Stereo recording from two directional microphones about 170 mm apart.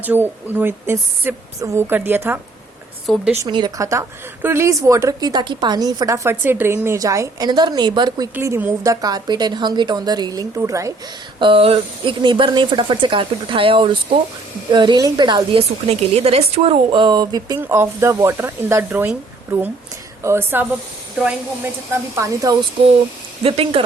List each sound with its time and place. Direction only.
0.0 s speech: 10° right (ahead or behind)
3.1 s a woman's voice: centre (ahead or behind)
3.4 s a woman's voice: 25° right (ahead or behind)
11.3 s a woman's voice: 30° right (ahead or behind)
15.9 s a woman's voice: 40° right (ahead or behind); by 22.5 s 20° right (ahead or behind)
23.4 s speech: 35° right (ahead or behind)